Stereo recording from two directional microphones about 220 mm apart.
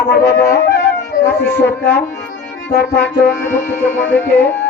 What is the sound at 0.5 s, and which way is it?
Music, 50° left (ahead or behind).